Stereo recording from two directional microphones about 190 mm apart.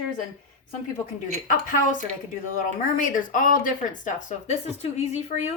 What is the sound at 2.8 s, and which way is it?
A woman's voice, 45° left (ahead or behind).